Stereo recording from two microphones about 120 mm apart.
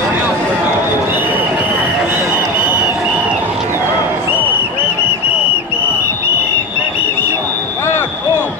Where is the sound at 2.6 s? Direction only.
10° right (ahead or behind).